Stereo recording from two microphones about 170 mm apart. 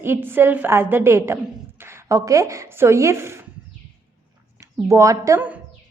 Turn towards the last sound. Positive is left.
turn(degrees=-15)  # may be behind; listen again after turning